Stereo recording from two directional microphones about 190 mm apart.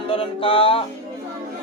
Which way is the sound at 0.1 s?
30° left (ahead or behind).